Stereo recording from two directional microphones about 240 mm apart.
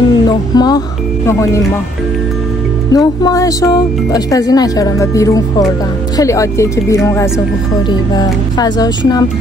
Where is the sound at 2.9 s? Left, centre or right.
Centre.